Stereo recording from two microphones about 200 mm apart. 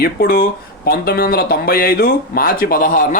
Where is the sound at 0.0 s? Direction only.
50° left (ahead or behind).